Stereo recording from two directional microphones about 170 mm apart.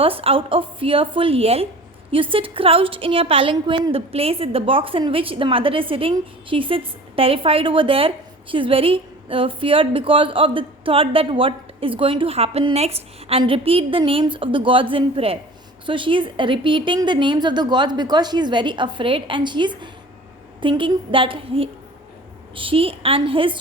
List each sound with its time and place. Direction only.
0.0 s a woman's voice: 35° right (ahead or behind)